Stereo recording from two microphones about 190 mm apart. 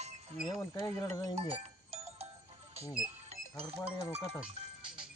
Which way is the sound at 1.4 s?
35° right (ahead or behind).